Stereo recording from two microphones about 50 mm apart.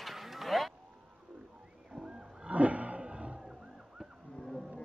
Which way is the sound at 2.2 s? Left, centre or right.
Right.